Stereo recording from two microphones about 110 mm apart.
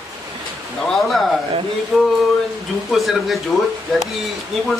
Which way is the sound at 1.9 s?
Centre (ahead or behind).